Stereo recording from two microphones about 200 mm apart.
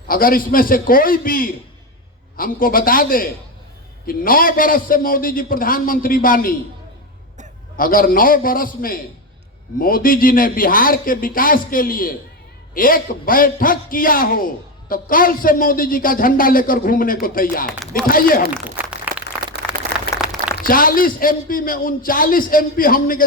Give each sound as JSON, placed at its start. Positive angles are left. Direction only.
{"t": 0.1, "sound": "a man's voice", "side_deg": 45}
{"t": 7.8, "sound": "a man's voice", "side_deg": 45}
{"t": 17.7, "sound": "a man's voice", "side_deg": 0}
{"t": 18.1, "sound": "a man's voice", "side_deg": 45}
{"t": 18.6, "sound": "a sound", "side_deg": -5}
{"t": 20.7, "sound": "a man's voice", "side_deg": 45}